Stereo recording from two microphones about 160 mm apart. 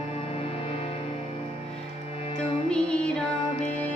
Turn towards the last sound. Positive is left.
turn(degrees=5)  # may be behind; listen again after turning